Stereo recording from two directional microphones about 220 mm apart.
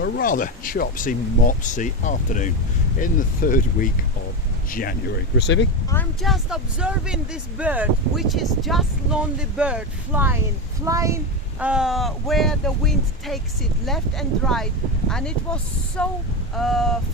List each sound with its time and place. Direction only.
0.0 s speech: 40° left (ahead or behind)
5.4 s speech: 55° left (ahead or behind)
5.9 s speech: 10° left (ahead or behind)
6.2 s speech: centre (ahead or behind)
11.6 s speech: 5° right (ahead or behind)